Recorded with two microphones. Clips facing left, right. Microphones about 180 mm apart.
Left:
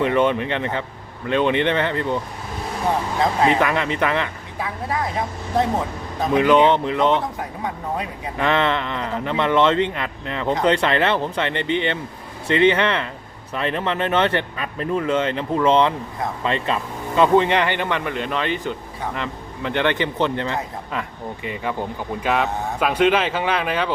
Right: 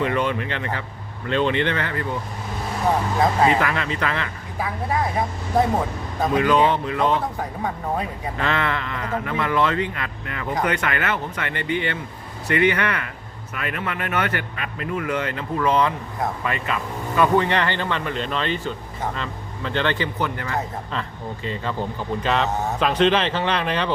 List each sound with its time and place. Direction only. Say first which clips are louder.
0.0 s speech: left 4 dB; 20° left (ahead or behind)
3.4 s speech: left 1 dB; 20° left (ahead or behind)
6.3 s speech: left 4 dB; 20° left (ahead or behind)
21.4 s speech: left 1 dB; 15° left (ahead or behind)